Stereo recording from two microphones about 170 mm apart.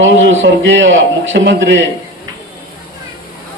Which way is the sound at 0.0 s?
90° right.